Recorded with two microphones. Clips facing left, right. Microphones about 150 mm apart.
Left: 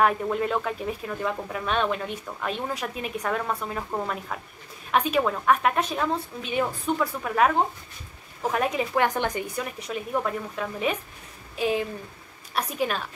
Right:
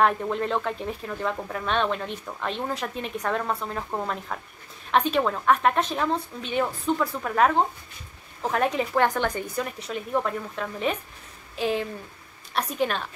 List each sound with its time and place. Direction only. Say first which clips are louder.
0.0 s a woman's voice: even; 5° left (ahead or behind)